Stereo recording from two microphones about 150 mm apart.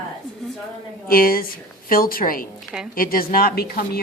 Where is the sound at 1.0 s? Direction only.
75° left (ahead or behind).